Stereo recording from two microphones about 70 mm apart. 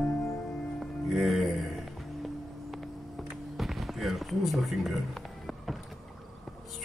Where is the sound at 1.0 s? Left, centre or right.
Centre.